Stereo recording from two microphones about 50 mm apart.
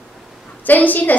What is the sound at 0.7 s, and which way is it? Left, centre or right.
Speech, left.